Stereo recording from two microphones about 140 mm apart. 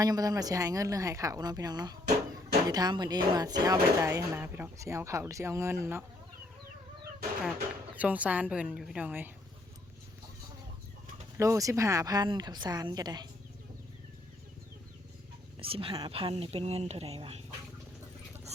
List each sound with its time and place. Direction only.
0.0 s a woman's voice: 25° right (ahead or behind)
4.4 s a woman's voice: 15° right (ahead or behind)
7.9 s a woman's voice: 10° right (ahead or behind)
11.3 s a woman's voice: 20° right (ahead or behind)
15.5 s a woman's voice: 40° right (ahead or behind)